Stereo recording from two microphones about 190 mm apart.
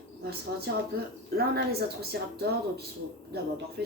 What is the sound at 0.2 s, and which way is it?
Speech, 55° right (ahead or behind).